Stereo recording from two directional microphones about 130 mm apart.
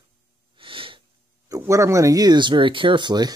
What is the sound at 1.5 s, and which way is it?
Speech, 25° right (ahead or behind).